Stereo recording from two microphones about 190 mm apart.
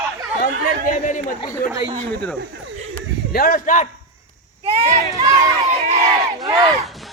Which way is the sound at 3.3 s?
50° left (ahead or behind).